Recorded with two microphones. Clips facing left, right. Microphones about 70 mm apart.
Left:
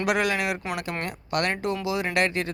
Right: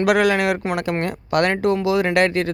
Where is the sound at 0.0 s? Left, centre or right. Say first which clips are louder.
Right 8 dB; right.